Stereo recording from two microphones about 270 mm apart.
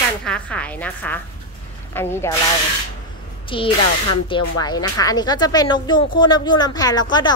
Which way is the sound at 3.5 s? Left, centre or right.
Centre.